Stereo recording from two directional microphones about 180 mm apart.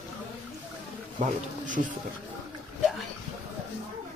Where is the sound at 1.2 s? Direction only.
45° right (ahead or behind).